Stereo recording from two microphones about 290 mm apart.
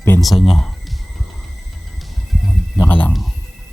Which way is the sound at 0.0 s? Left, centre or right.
Centre.